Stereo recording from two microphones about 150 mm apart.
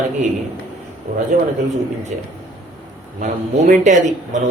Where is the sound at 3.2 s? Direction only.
55° right (ahead or behind).